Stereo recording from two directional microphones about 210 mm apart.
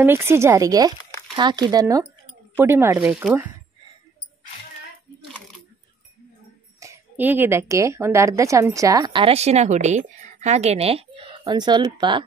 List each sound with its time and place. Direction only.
0.0 s a woman's voice: 10° right (ahead or behind)
6.8 s a woman's voice: 10° right (ahead or behind)